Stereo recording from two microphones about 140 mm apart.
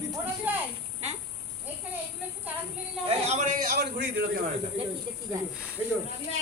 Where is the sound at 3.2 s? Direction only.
55° right (ahead or behind); by 3.8 s 75° right (ahead or behind).